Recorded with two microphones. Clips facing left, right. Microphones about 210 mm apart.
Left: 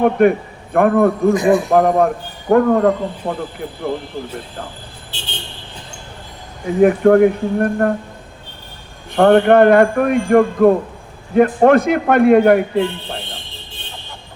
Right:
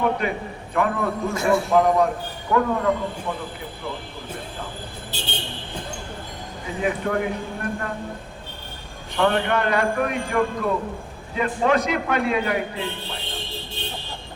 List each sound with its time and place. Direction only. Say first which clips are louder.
0.0 s a man's voice: left 10 dB; 55° left (ahead or behind)
1.3 s a man's voice: left 8 dB; 15° left (ahead or behind)
1.7 s a man's voice: left 5 dB; 55° left (ahead or behind)
5.1 s vehicle: right 2 dB; 40° right (ahead or behind)
6.8 s a man's voice: left 14 dB; 55° left (ahead or behind)
9.1 s a man's voice: left 11 dB; 55° left (ahead or behind)